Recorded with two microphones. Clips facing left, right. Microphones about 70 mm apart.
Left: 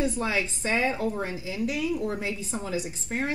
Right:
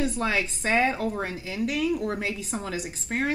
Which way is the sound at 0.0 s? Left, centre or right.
Right.